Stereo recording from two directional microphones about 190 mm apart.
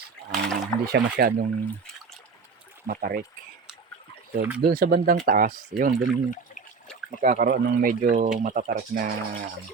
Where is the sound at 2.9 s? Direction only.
50° right (ahead or behind).